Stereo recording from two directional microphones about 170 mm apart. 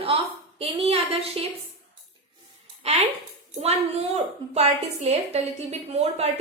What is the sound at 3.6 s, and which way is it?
A woman's voice, 40° right (ahead or behind).